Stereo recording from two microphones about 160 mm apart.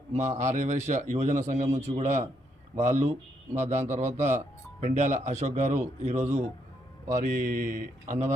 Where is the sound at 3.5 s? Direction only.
45° right (ahead or behind).